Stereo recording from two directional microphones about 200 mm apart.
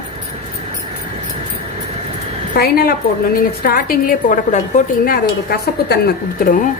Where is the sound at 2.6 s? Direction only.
50° left (ahead or behind).